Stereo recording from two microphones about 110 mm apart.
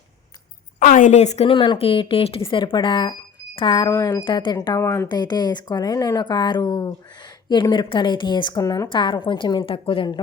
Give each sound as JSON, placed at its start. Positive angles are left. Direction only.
{"t": 1.1, "sound": "a woman's voice", "side_deg": 90}
{"t": 1.5, "sound": "speech", "side_deg": 50}
{"t": 3.8, "sound": "speech", "side_deg": 25}
{"t": 4.2, "sound": "speech", "side_deg": 50}
{"t": 4.8, "sound": "speech", "side_deg": 25}
{"t": 5.0, "sound": "speech", "side_deg": 40}
{"t": 8.6, "sound": "speech", "side_deg": 30}
{"t": 8.9, "sound": "speech", "side_deg": 45}